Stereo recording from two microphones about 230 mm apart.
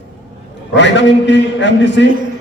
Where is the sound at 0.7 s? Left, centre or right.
Left.